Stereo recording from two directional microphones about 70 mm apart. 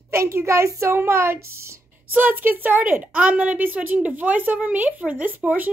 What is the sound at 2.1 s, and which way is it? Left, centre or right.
Speech, right.